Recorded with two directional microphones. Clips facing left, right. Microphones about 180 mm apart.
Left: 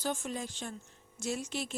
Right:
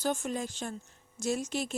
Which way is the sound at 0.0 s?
45° right (ahead or behind).